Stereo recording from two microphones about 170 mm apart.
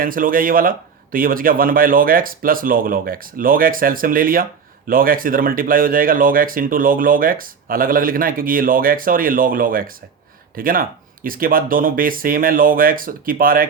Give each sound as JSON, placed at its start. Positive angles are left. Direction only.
{"t": 0.0, "sound": "speech", "side_deg": -55}